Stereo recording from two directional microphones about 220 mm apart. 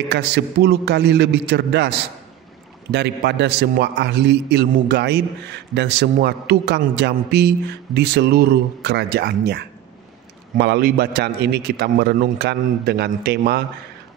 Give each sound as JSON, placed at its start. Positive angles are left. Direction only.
{"t": 0.1, "sound": "a man's voice", "side_deg": -50}